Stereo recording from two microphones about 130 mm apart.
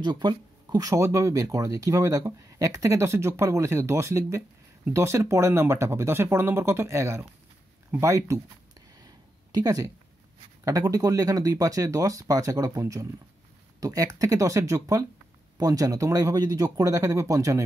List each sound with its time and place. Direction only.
0.0 s speech: 35° right (ahead or behind)
9.0 s a sound: 30° right (ahead or behind)
10.6 s speech: 25° right (ahead or behind)